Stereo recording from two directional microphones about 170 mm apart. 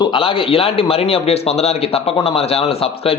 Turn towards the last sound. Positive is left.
turn(degrees=35)  # may be behind; listen again after turning